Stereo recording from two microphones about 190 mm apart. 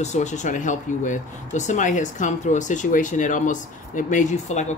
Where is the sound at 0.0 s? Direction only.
40° left (ahead or behind).